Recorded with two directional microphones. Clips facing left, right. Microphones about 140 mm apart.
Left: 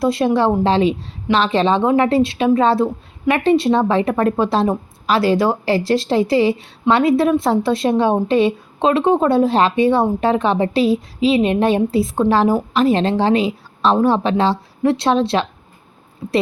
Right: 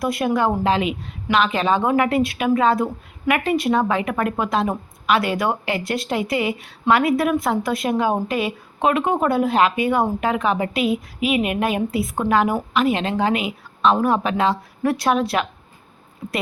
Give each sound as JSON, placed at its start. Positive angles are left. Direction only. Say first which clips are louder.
{"t": 0.0, "sound": "a woman's voice", "louder": "left 4 dB", "side_deg": 25}